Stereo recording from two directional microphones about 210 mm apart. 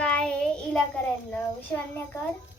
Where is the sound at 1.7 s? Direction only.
5° left (ahead or behind).